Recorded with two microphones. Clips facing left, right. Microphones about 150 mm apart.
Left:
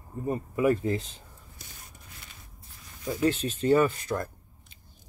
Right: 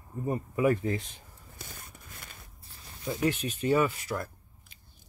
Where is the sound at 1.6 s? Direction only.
55° right (ahead or behind).